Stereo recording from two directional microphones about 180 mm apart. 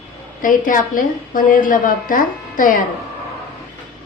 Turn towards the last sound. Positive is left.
turn(degrees=50)  # may be behind; listen again after turning